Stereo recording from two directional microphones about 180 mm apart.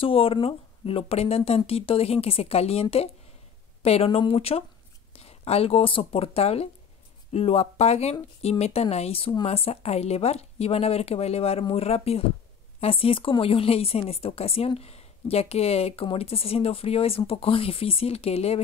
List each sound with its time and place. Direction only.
0.0 s speech: 30° left (ahead or behind)